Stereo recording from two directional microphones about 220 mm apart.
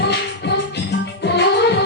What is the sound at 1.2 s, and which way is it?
Music, 50° left (ahead or behind).